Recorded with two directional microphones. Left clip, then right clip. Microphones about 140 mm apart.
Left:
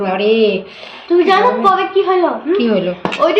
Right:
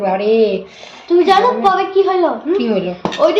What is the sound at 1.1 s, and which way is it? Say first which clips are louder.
Speech: even; 35° right (ahead or behind).